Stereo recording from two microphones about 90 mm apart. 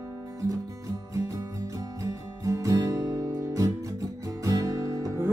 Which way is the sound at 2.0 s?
35° right (ahead or behind).